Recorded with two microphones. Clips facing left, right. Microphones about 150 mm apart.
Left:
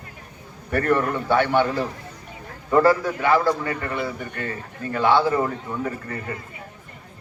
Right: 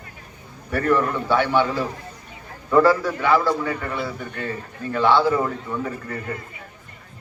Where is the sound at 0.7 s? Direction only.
50° left (ahead or behind).